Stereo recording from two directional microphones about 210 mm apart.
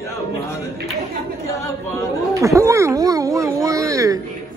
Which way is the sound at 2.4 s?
15° right (ahead or behind).